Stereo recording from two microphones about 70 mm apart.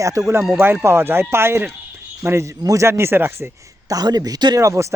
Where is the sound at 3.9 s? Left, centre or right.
Right.